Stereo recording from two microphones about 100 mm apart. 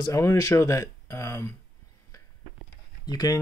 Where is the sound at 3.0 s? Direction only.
40° left (ahead or behind).